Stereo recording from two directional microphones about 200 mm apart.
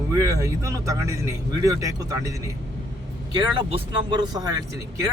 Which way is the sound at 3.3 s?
20° right (ahead or behind).